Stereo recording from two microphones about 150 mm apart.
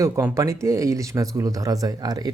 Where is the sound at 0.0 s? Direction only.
20° right (ahead or behind).